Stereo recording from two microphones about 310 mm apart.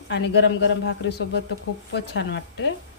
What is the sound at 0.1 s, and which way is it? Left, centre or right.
A woman's voice, left.